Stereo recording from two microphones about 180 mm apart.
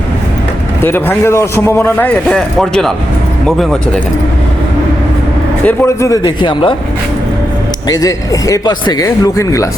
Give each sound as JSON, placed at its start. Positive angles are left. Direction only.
{"t": 0.8, "sound": "a man's voice", "side_deg": 10}
{"t": 5.6, "sound": "speech", "side_deg": 15}
{"t": 7.9, "sound": "speech", "side_deg": 20}